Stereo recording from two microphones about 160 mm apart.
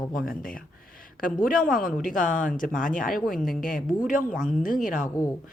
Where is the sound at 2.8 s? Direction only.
55° left (ahead or behind).